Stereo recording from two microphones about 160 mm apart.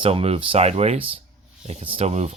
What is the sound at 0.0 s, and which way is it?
Speech, 35° right (ahead or behind).